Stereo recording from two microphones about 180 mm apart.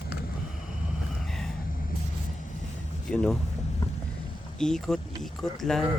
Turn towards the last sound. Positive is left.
turn(degrees=0)  # may be behind; listen again after turning